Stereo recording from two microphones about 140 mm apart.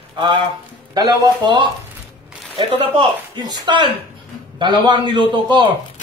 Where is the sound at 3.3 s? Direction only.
30° right (ahead or behind).